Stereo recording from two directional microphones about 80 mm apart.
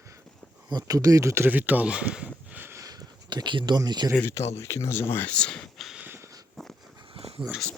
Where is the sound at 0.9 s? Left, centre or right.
Right.